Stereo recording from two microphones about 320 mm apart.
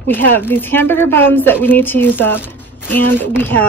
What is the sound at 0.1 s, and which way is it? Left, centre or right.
A woman's voice, centre.